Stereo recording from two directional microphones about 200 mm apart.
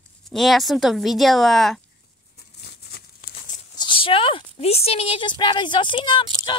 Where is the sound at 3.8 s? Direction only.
25° left (ahead or behind).